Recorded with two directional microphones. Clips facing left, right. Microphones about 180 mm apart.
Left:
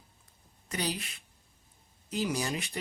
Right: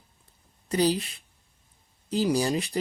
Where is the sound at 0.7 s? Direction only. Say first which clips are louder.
Right 11 dB; 30° right (ahead or behind).